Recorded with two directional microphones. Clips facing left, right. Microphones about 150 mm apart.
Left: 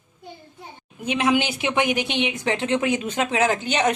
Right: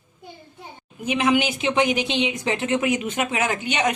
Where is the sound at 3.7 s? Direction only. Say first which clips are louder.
Left 2 dB; 35° left (ahead or behind).